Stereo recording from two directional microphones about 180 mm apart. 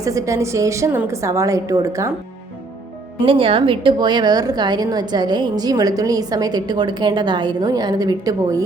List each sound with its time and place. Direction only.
0.0 s a woman's voice: 15° right (ahead or behind)
3.2 s a woman's voice: 30° right (ahead or behind)